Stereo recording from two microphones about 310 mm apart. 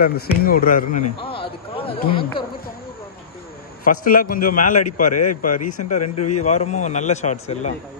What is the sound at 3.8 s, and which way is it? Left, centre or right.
A man's voice, left.